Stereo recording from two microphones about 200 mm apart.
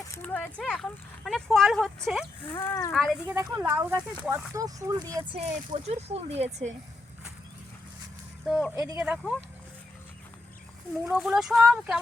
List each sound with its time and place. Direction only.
0.1 s speech: 10° left (ahead or behind)
2.5 s speech: 15° left (ahead or behind)
2.9 s speech: centre (ahead or behind); by 5.4 s 20° right (ahead or behind)
5.4 s speech: 35° right (ahead or behind)
8.7 s speech: 20° right (ahead or behind)
9.0 s speech: centre (ahead or behind)
11.0 s speech: 5° right (ahead or behind)